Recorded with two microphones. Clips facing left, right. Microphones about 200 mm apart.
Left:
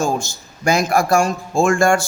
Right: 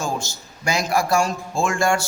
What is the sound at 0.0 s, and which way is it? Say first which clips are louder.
A man's voice: left 6 dB; 50° left (ahead or behind).